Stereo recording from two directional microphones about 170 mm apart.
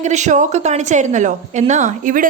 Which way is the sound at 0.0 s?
45° right (ahead or behind).